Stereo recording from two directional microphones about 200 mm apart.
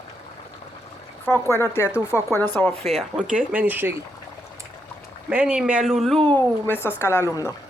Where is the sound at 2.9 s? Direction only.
5° right (ahead or behind).